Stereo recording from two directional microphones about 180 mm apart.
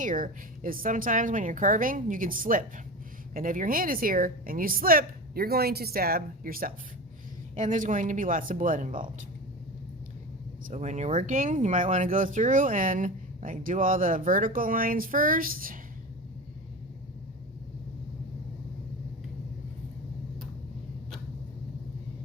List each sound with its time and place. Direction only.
0.0 s speech: 50° right (ahead or behind)
10.7 s speech: 40° right (ahead or behind)